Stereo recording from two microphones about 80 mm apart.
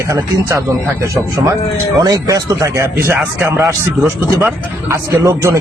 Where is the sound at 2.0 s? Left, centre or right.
Right.